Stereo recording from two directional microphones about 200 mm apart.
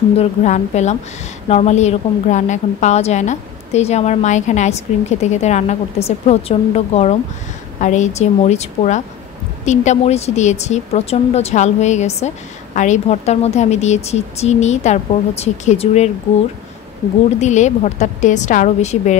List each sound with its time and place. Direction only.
0.2 s a woman's voice: 35° left (ahead or behind)
17.4 s a woman's voice: 35° left (ahead or behind)